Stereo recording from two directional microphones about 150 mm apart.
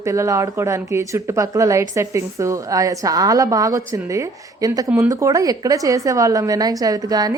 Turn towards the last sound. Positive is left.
turn(degrees=-25)  # may be behind; listen again after turning